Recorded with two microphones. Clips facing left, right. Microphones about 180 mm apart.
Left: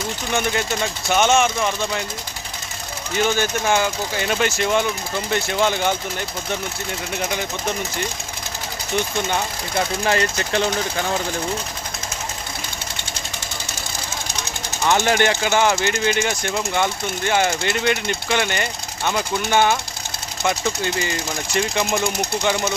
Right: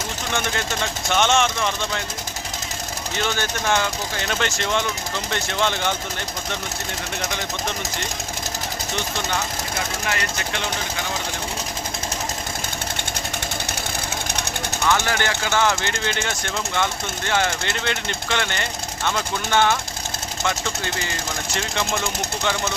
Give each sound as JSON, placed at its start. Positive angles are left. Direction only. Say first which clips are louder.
{"t": 1.1, "sound": "speech", "louder": "left 3 dB", "side_deg": 5}
{"t": 3.7, "sound": "speech", "louder": "even", "side_deg": 10}
{"t": 10.1, "sound": "speech", "louder": "left 6 dB", "side_deg": 35}
{"t": 14.8, "sound": "speech", "louder": "left 5 dB", "side_deg": 20}